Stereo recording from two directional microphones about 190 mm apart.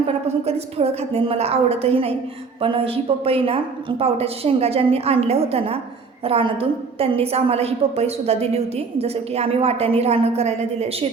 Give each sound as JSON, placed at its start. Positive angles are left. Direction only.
{"t": 0.0, "sound": "a woman's voice", "side_deg": -30}